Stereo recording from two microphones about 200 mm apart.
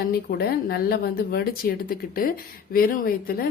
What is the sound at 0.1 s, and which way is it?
A woman's voice, 50° left (ahead or behind).